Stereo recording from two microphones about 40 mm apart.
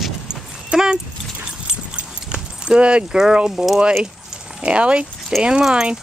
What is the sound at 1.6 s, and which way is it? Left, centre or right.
Keys jangling, right.